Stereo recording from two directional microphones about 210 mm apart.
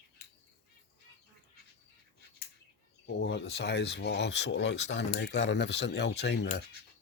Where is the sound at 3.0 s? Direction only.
55° left (ahead or behind).